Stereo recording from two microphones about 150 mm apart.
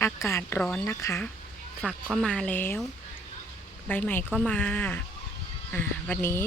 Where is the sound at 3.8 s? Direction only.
10° left (ahead or behind).